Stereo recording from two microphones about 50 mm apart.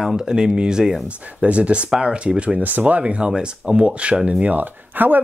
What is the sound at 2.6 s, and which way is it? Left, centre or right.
Speech, right.